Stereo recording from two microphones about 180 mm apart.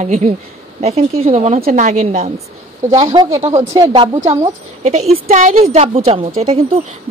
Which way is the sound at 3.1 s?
25° right (ahead or behind).